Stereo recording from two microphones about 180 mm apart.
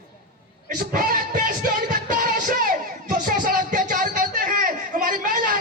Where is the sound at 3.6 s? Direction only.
50° right (ahead or behind).